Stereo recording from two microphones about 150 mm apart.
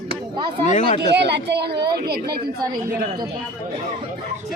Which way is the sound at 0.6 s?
55° left (ahead or behind).